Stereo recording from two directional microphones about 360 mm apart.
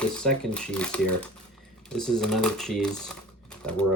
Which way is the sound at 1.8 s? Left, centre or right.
Centre.